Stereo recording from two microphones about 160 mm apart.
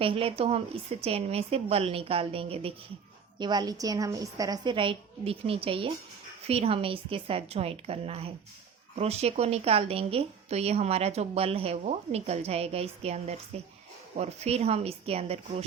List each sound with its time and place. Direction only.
0.0 s a woman's voice: 35° right (ahead or behind)
3.3 s a woman's voice: 25° right (ahead or behind)